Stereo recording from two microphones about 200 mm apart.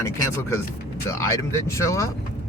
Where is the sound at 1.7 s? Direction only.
15° left (ahead or behind).